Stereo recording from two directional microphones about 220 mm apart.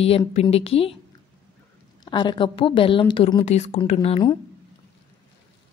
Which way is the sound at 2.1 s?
20° left (ahead or behind).